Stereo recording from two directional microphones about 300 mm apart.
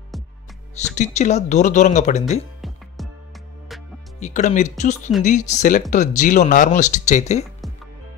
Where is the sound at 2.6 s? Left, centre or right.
Centre.